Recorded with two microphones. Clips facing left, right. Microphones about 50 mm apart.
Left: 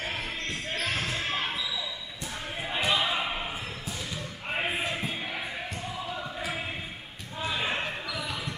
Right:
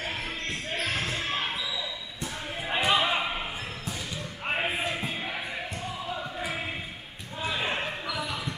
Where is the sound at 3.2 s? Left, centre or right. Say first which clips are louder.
Right 1 dB; centre.